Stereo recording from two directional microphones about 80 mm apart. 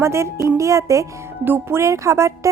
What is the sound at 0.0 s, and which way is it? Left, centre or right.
A woman's voice, right.